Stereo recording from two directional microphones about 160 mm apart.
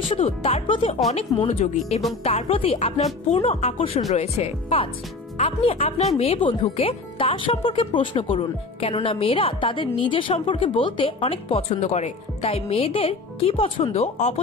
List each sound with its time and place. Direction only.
0.1 s speech: 35° left (ahead or behind)